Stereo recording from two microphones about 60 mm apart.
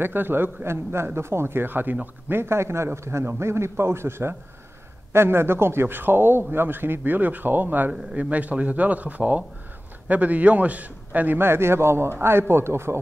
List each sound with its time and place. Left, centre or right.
0.0 s a man's voice: right
7.9 s speech: right
11.3 s a man's voice: right